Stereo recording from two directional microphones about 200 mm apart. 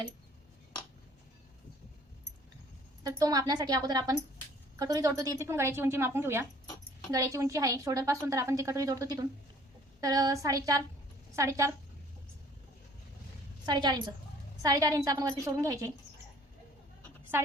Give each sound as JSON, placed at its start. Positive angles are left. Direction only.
{"t": 3.0, "sound": "a woman's voice", "side_deg": -15}
{"t": 13.7, "sound": "a woman's voice", "side_deg": -20}